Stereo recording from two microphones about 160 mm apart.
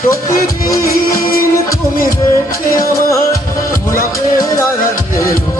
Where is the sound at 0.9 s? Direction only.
65° left (ahead or behind).